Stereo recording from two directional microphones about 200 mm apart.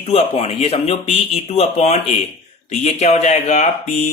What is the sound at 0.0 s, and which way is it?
Speech, 30° left (ahead or behind).